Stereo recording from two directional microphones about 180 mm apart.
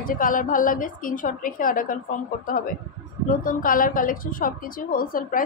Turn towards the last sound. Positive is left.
turn(degrees=50)  # may be behind; listen again after turning